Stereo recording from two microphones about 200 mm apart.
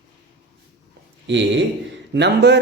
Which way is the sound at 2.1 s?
60° right (ahead or behind).